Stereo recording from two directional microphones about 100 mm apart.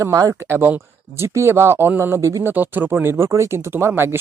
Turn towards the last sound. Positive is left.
turn(degrees=-25)  # may be behind; listen again after turning